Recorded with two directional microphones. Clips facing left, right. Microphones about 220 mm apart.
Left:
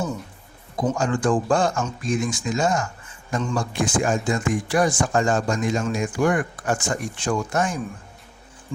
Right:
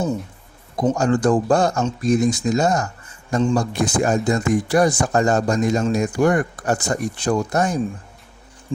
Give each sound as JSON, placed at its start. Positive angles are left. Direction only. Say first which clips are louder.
{"t": 0.9, "sound": "speech", "louder": "right 4 dB", "side_deg": -40}